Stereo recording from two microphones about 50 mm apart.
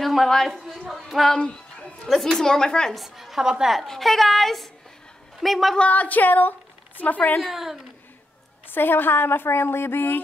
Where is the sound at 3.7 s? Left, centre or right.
Centre.